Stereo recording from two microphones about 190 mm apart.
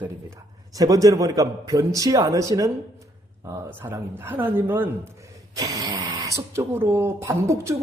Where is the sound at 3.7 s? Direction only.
10° right (ahead or behind).